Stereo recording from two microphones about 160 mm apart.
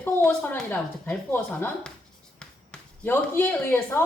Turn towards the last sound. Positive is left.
turn(degrees=15)  # may be behind; listen again after turning